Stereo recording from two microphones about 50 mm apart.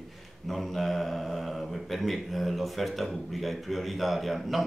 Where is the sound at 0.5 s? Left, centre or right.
Centre.